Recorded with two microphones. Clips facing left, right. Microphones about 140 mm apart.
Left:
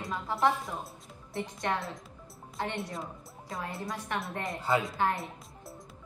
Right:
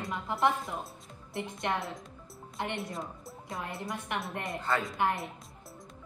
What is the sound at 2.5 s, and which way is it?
Speech, 20° right (ahead or behind).